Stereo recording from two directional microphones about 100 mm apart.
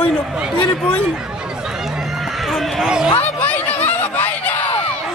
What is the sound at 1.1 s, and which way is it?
Run, 5° right (ahead or behind).